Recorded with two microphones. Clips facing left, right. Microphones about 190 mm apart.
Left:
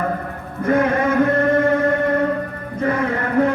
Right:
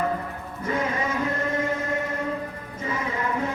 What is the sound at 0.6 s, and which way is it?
Chant, 55° left (ahead or behind).